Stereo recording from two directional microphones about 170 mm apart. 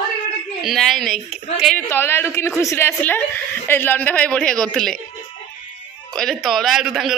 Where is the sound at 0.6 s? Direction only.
Centre (ahead or behind).